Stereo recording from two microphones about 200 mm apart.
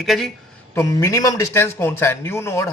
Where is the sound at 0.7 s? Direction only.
15° left (ahead or behind).